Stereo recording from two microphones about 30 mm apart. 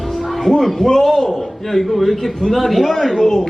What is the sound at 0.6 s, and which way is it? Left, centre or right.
A man's voice, centre.